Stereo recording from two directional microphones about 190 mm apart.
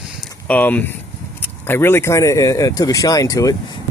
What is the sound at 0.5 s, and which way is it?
Speech, 10° left (ahead or behind).